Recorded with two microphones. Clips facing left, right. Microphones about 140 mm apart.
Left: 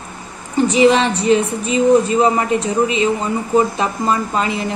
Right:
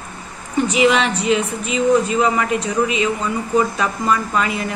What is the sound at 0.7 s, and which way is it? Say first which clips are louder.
A woman's voice: left 4 dB; 30° left (ahead or behind).